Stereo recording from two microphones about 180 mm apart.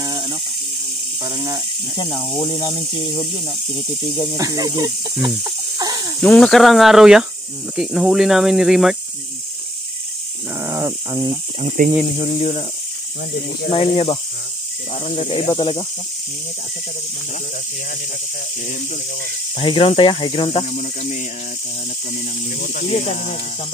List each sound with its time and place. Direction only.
0.0 s snake: 20° right (ahead or behind)
1.2 s speech: 20° right (ahead or behind)
2.0 s speech: 20° left (ahead or behind)
4.4 s speech: 20° right (ahead or behind)
5.4 s snake: 20° right (ahead or behind)
6.2 s speech: 5° left (ahead or behind)
10.6 s a sound: 15° right (ahead or behind)
11.8 s speech: 45° right (ahead or behind)
12.2 s speech: 35° left (ahead or behind)
13.7 s speech: 30° left (ahead or behind)
19.5 s speech: 30° left (ahead or behind)
22.6 s speech: 45° left (ahead or behind)